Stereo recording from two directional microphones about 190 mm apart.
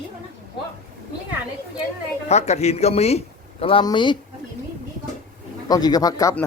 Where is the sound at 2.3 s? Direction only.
35° left (ahead or behind).